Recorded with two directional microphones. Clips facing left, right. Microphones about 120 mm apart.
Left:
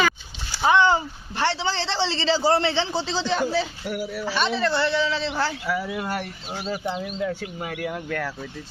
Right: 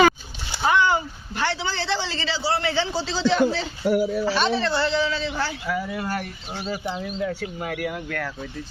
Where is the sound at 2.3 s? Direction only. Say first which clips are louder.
Left 4 dB; 40° left (ahead or behind).